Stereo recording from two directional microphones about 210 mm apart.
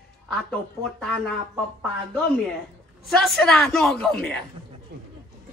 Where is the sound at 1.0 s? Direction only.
Centre (ahead or behind).